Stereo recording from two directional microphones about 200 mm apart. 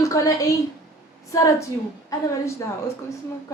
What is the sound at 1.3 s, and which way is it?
Speech, 15° left (ahead or behind).